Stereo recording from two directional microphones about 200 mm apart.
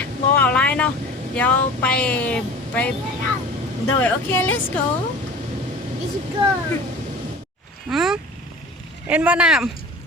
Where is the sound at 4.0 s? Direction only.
10° left (ahead or behind).